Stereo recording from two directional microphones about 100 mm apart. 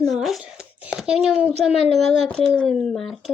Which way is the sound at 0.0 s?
Centre (ahead or behind).